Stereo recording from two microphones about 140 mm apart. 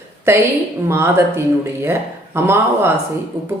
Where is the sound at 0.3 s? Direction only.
20° right (ahead or behind).